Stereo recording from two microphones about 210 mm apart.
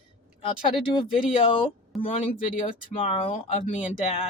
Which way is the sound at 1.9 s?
Centre (ahead or behind).